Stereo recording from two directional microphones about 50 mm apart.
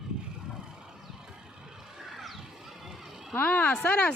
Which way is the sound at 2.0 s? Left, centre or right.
Centre.